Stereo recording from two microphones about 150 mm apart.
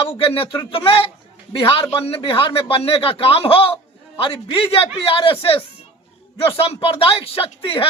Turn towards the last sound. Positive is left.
turn(degrees=35)  # may be behind; listen again after turning